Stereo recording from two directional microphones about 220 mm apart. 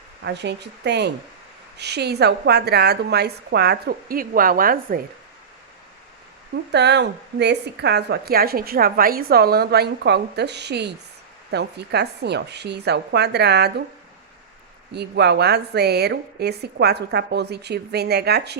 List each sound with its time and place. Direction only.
0.3 s a woman's voice: 50° right (ahead or behind)
6.7 s a woman's voice: 50° right (ahead or behind)
14.9 s a woman's voice: 50° right (ahead or behind)